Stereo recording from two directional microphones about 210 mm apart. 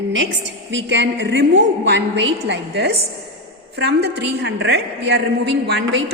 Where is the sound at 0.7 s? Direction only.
60° right (ahead or behind).